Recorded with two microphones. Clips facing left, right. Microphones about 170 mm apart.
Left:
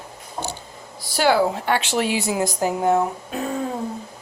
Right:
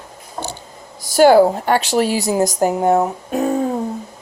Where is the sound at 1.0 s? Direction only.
45° right (ahead or behind).